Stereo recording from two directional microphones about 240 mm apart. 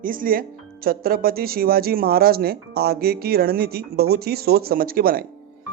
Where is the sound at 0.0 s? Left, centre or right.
Right.